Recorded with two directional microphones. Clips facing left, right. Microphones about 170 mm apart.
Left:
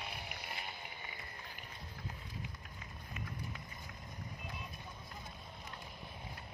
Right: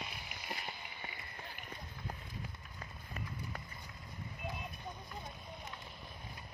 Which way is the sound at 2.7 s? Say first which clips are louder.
Right 1 dB; 50° right (ahead or behind).